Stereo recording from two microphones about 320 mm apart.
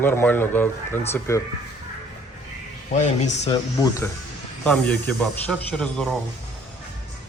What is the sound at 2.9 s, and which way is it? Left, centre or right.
Speech, left.